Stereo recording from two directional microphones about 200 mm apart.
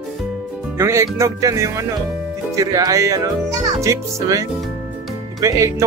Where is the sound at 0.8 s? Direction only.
15° right (ahead or behind).